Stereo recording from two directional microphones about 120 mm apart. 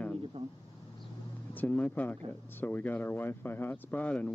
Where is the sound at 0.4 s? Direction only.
60° right (ahead or behind).